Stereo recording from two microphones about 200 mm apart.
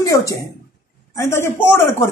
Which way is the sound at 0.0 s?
15° left (ahead or behind).